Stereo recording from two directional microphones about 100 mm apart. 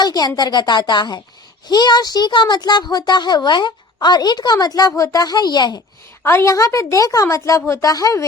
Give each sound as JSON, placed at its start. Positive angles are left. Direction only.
{"t": 0.0, "sound": "a woman's voice", "side_deg": 40}
{"t": 6.2, "sound": "a woman's voice", "side_deg": 30}